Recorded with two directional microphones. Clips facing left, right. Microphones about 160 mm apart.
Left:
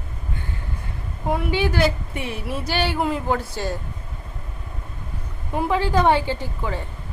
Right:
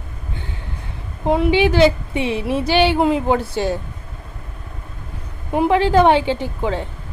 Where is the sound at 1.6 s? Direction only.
85° right.